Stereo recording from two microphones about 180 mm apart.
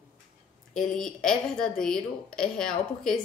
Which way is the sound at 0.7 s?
Centre (ahead or behind).